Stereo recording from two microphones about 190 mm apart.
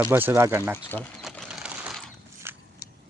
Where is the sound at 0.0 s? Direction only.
10° right (ahead or behind).